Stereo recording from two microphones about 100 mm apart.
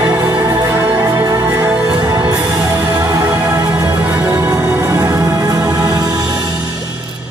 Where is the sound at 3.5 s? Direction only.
40° right (ahead or behind).